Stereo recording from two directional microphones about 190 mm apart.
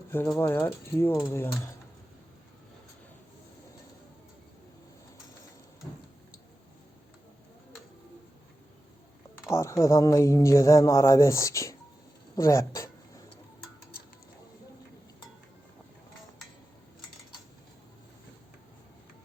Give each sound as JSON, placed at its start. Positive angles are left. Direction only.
{"t": 0.3, "sound": "speech", "side_deg": 10}
{"t": 9.5, "sound": "speech", "side_deg": 15}